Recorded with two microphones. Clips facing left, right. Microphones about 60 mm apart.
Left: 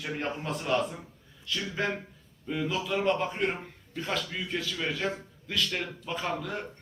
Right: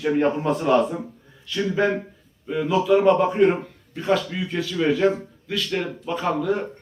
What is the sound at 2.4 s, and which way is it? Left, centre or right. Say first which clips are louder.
A man's voice: right 11 dB; centre.